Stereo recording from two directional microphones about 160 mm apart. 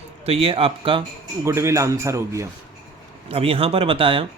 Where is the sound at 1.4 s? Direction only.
15° right (ahead or behind).